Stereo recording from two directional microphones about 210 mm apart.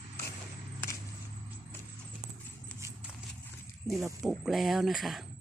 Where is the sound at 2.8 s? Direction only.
15° right (ahead or behind).